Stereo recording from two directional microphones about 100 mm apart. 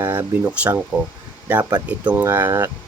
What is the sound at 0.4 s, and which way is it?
Speech, 15° right (ahead or behind).